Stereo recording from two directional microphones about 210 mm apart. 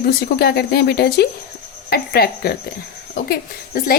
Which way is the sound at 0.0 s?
50° left (ahead or behind).